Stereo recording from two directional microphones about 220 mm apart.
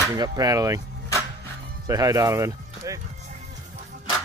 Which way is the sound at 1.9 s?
15° right (ahead or behind).